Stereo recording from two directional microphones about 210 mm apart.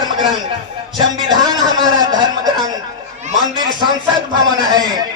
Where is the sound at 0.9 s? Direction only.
20° right (ahead or behind).